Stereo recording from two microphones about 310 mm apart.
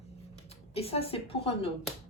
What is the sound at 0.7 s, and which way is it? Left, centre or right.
Speech, centre.